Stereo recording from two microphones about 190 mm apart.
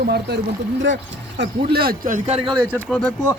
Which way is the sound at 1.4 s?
55° right (ahead or behind).